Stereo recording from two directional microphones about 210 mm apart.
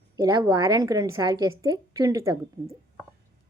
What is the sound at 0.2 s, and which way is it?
A woman's voice, 20° right (ahead or behind).